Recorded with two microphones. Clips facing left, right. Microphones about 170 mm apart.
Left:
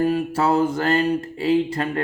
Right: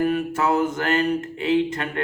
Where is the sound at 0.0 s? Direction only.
30° left (ahead or behind).